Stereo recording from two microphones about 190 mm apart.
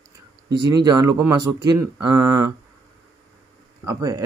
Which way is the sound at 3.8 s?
15° right (ahead or behind).